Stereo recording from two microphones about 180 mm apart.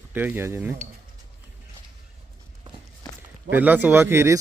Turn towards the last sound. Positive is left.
turn(degrees=-15)  # may be behind; listen again after turning